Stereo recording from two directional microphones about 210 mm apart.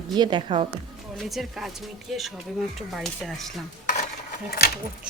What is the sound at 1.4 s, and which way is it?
Speech, centre (ahead or behind).